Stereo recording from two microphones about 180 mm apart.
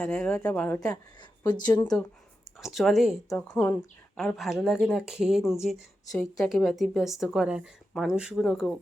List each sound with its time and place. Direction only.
0.0 s a woman's voice: 5° left (ahead or behind)
1.6 s speech: 25° left (ahead or behind)
2.6 s a woman's voice: centre (ahead or behind)
4.2 s a woman's voice: centre (ahead or behind)